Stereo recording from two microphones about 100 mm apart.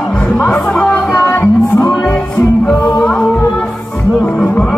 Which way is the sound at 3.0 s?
5° left (ahead or behind).